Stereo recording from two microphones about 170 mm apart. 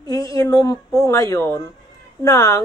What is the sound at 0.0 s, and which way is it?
A woman's voice, 20° left (ahead or behind).